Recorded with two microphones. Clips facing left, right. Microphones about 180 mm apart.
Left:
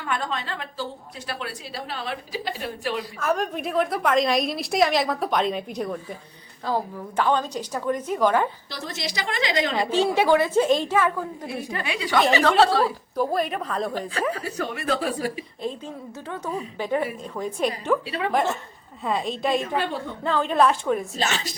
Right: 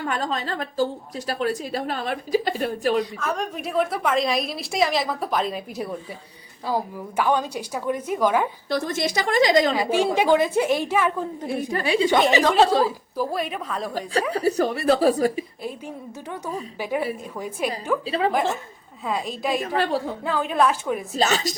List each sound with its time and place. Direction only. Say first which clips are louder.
0.0 s a woman's voice: right 2 dB; 40° right (ahead or behind)
3.0 s a woman's voice: left 1 dB; 5° left (ahead or behind)
8.7 s a woman's voice: right 8 dB; 50° right (ahead or behind)
9.7 s a woman's voice: right 2 dB; centre (ahead or behind)
10.0 s a woman's voice: even; 15° right (ahead or behind)
11.4 s a woman's voice: right 5 dB; 40° right (ahead or behind); by 12.9 s 20° right (ahead or behind)
13.1 s a woman's voice: left 3 dB; centre (ahead or behind)
14.1 s a woman's voice: right 5 dB; 35° right (ahead or behind)
16.7 s a woman's voice: even; 10° right (ahead or behind)
18.0 s a woman's voice: right 5 dB; 30° right (ahead or behind)
18.3 s a woman's voice: left 4 dB; centre (ahead or behind)
21.2 s a woman's voice: right 5 dB; 40° right (ahead or behind)